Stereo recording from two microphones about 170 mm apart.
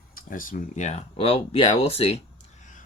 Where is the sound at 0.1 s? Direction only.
55° left (ahead or behind); by 2.1 s 35° left (ahead or behind).